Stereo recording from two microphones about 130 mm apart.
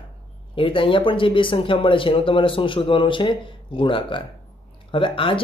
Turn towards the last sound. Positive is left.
turn(degrees=40)  # may be behind; listen again after turning